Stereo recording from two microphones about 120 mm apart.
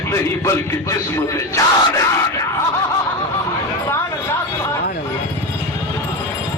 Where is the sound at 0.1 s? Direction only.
25° left (ahead or behind).